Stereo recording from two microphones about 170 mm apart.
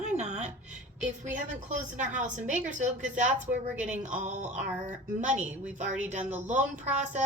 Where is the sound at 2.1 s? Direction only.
45° right (ahead or behind).